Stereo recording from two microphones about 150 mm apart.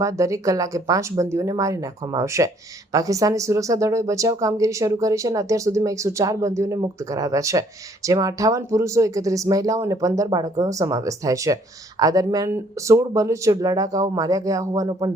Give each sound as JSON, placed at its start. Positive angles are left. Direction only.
{"t": 0.0, "sound": "speech", "side_deg": -20}